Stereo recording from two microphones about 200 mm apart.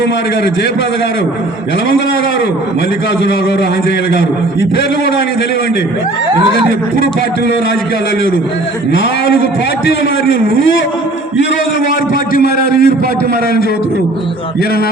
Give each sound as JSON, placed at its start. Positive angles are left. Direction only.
{"t": 12.3, "sound": "a man's voice", "side_deg": 50}